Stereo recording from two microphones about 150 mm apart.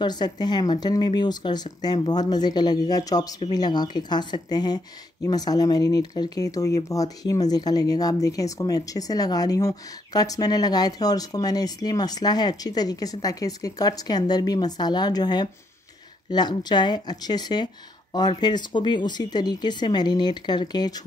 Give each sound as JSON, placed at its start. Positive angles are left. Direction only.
{"t": 0.0, "sound": "speech", "side_deg": 30}